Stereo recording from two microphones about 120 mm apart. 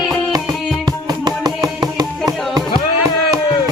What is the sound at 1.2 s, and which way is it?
Music, 35° right (ahead or behind).